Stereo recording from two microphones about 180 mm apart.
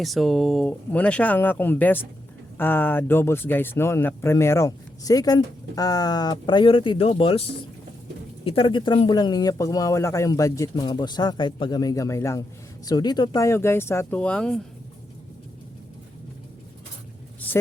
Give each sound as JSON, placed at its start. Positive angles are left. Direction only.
{"t": 0.0, "sound": "speech", "side_deg": 0}
{"t": 8.4, "sound": "speech", "side_deg": 30}